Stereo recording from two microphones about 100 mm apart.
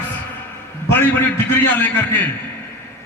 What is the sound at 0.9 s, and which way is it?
A man's voice, 15° left (ahead or behind).